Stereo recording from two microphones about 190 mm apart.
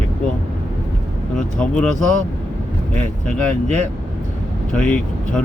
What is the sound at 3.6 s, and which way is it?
Speech, 35° right (ahead or behind).